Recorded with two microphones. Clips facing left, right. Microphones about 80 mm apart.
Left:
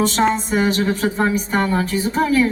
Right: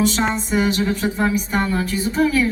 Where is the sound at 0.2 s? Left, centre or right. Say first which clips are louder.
Left 4 dB; left.